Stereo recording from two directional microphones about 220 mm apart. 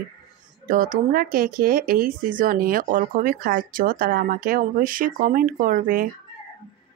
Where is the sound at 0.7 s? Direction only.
40° right (ahead or behind).